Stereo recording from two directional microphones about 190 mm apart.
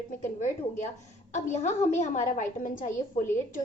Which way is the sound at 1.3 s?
40° left (ahead or behind).